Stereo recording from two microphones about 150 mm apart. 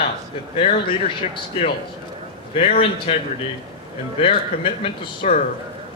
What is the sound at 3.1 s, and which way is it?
Speech, 40° left (ahead or behind).